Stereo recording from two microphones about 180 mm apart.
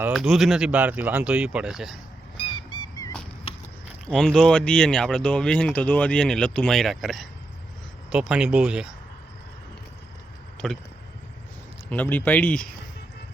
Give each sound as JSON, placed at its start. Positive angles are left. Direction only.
{"t": 0.1, "sound": "speech", "side_deg": 0}
{"t": 2.4, "sound": "a sound", "side_deg": 25}
{"t": 4.1, "sound": "speech", "side_deg": 5}
{"t": 10.6, "sound": "speech", "side_deg": 0}
{"t": 11.9, "sound": "speech", "side_deg": 10}